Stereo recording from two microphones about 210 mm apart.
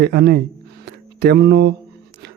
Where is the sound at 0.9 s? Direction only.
50° right (ahead or behind).